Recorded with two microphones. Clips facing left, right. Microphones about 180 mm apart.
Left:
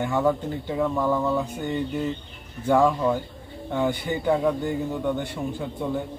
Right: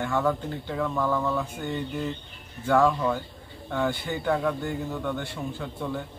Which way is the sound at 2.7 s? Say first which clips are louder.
Left 2 dB; 15° left (ahead or behind).